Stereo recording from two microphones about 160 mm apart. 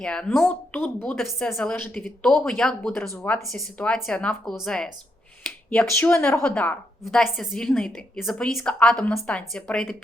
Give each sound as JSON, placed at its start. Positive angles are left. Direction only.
{"t": 0.0, "sound": "speech", "side_deg": 5}
{"t": 1.1, "sound": "a woman's voice", "side_deg": 0}
{"t": 2.9, "sound": "speech", "side_deg": 15}
{"t": 3.5, "sound": "a woman's voice", "side_deg": 5}
{"t": 5.9, "sound": "a woman's voice", "side_deg": 15}